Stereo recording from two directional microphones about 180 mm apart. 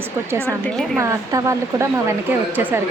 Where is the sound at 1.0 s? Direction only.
15° right (ahead or behind).